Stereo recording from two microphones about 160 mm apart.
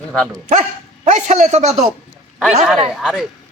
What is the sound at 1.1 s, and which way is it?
Speech, 50° right (ahead or behind).